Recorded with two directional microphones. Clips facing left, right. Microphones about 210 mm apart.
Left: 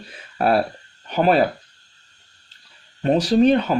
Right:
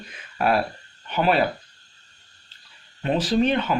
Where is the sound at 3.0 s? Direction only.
40° left (ahead or behind).